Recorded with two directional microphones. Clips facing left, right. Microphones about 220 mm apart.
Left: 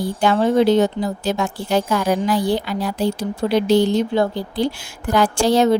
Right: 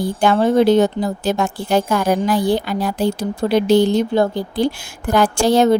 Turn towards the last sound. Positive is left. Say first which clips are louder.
# right 2 dB
turn(degrees=-50)  # may be behind; listen again after turning